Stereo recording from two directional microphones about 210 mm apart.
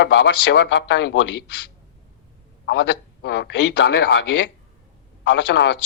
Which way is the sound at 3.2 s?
55° left (ahead or behind).